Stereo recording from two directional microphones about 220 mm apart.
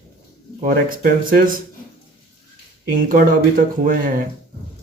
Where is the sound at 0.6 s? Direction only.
40° right (ahead or behind).